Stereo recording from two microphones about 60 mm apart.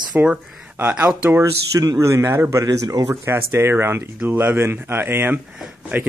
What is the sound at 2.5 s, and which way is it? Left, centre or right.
Speech, right.